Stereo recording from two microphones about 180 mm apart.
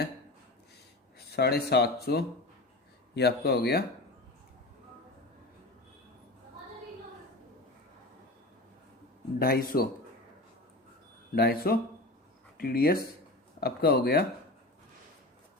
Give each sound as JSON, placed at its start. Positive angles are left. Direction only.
{"t": 1.3, "sound": "speech", "side_deg": 60}
{"t": 9.4, "sound": "speech", "side_deg": 55}
{"t": 11.3, "sound": "speech", "side_deg": 60}